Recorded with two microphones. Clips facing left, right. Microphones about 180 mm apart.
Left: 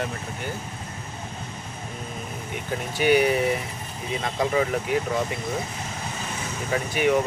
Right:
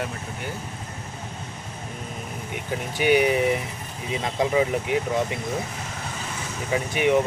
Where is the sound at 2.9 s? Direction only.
15° right (ahead or behind).